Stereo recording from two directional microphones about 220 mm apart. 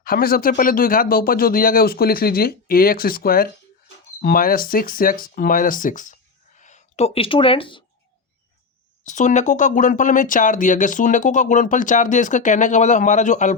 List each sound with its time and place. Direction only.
0.0 s speech: 40° left (ahead or behind); by 7.9 s 25° left (ahead or behind)
9.0 s speech: 35° left (ahead or behind)